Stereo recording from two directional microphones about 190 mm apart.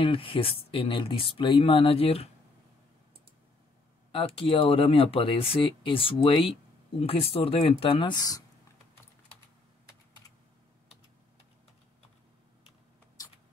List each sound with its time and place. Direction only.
0.0 s speech: 30° left (ahead or behind)
4.1 s speech: 30° left (ahead or behind)